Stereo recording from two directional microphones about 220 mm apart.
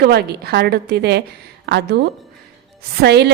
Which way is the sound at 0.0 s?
45° right (ahead or behind).